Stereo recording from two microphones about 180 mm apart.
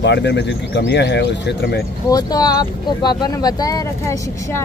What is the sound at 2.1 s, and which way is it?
Speech, 20° left (ahead or behind).